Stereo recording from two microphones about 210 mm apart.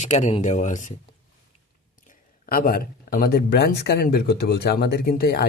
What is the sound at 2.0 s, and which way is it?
Speech, 40° left (ahead or behind).